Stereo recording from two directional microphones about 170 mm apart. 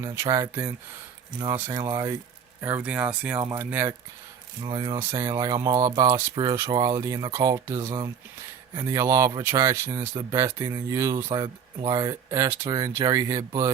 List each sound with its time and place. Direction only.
0.0 s speech: 20° right (ahead or behind)
1.5 s speech: 15° right (ahead or behind)
4.6 s speech: 25° right (ahead or behind)
11.3 s speech: 30° right (ahead or behind)